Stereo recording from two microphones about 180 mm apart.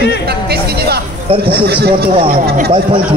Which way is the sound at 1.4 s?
60° right (ahead or behind).